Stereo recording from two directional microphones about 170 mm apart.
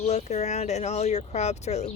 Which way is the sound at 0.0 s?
40° left (ahead or behind).